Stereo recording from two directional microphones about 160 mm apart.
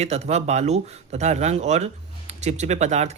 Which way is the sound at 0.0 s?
40° right (ahead or behind).